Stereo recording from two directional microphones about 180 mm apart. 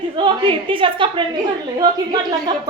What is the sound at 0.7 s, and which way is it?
Speech, 30° right (ahead or behind).